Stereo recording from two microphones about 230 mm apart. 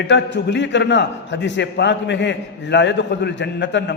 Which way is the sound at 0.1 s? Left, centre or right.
Left.